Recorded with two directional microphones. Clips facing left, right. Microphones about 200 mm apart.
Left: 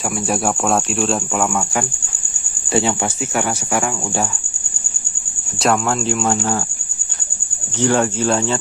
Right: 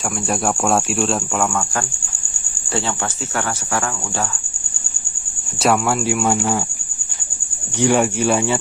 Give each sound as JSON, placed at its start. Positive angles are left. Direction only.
{"t": 0.0, "sound": "speech", "side_deg": 0}
{"t": 2.7, "sound": "speech", "side_deg": 15}
{"t": 5.6, "sound": "speech", "side_deg": -10}
{"t": 7.8, "sound": "speech", "side_deg": -15}